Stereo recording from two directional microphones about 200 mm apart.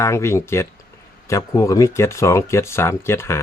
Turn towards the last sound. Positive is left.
turn(degrees=15)  # may be behind; listen again after turning